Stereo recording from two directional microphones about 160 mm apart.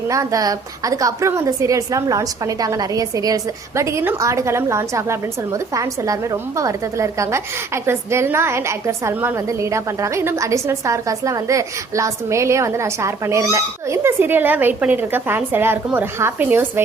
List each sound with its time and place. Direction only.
0.1 s a woman's voice: 20° right (ahead or behind)